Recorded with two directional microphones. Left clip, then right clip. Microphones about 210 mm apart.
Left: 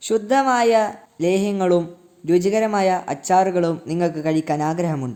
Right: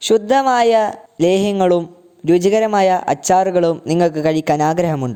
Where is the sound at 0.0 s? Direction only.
35° right (ahead or behind).